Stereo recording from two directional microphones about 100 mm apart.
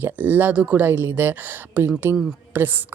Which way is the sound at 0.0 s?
20° right (ahead or behind).